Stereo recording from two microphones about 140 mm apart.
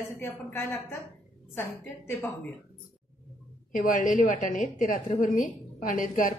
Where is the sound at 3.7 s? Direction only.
75° left (ahead or behind).